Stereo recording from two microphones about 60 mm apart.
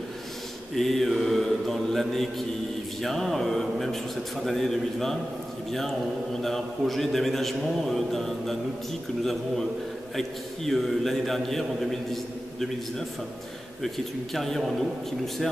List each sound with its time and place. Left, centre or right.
0.7 s mantra: centre
3.0 s a man's voice: centre
13.9 s a man's voice: centre